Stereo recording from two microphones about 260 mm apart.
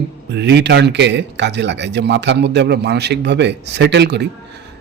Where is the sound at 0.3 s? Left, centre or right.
Right.